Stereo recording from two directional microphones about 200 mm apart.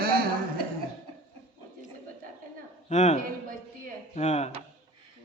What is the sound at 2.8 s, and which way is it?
Speech, 35° left (ahead or behind).